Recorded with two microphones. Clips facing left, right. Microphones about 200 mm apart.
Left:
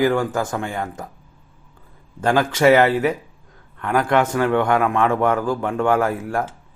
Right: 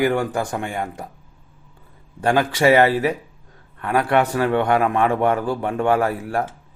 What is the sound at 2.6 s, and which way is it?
A man's voice, 30° right (ahead or behind).